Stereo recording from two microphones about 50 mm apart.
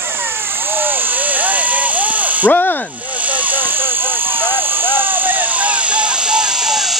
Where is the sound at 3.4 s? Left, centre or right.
Right.